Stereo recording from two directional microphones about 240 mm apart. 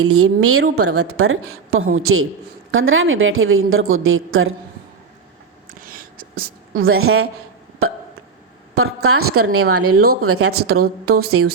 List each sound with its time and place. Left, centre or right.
0.0 s speech: right
6.8 s speech: right